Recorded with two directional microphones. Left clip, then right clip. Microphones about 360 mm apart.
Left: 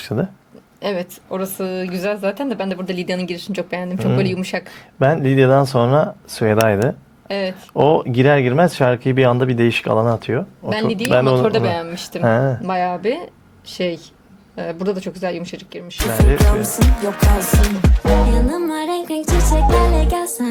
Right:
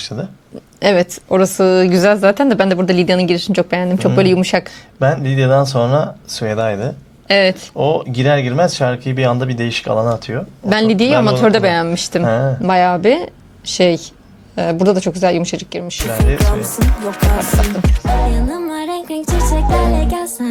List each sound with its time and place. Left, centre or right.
0.0 s speech: left
0.8 s speech: centre
4.9 s speech: left
7.3 s speech: centre
7.8 s speech: left
10.7 s speech: centre
12.2 s speech: left
12.6 s speech: centre